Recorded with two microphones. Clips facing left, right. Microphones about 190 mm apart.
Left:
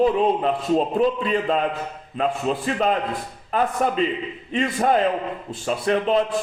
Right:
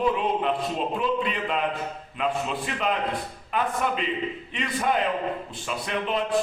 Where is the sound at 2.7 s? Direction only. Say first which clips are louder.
Left 5 dB; 40° left (ahead or behind).